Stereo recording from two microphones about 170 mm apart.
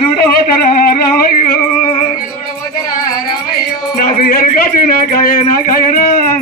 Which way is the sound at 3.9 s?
55° left (ahead or behind).